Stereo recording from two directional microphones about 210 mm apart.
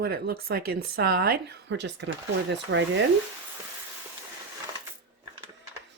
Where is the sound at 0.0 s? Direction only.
45° right (ahead or behind).